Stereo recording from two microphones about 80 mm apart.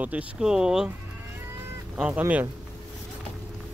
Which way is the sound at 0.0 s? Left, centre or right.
Centre.